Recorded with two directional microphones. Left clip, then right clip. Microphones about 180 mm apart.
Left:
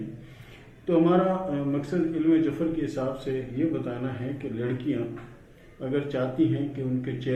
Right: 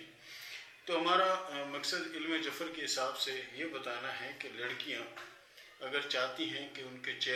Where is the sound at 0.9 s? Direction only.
20° right (ahead or behind).